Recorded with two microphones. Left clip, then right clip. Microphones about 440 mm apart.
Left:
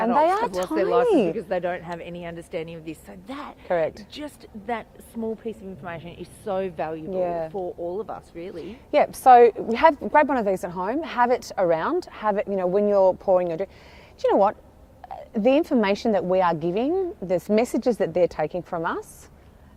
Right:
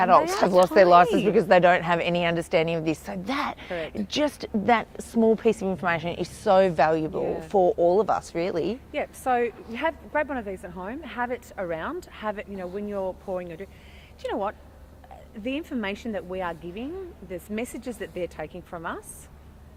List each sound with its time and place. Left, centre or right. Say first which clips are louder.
0.4 s speech: right 7 dB; right
7.2 s speech: left 3 dB; left
7.5 s speech: right 10 dB; right
8.9 s a woman's voice: left 15 dB; left